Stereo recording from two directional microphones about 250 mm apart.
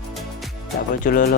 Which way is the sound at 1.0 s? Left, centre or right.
Left.